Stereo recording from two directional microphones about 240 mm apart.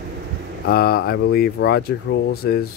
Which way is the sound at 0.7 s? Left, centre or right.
Left.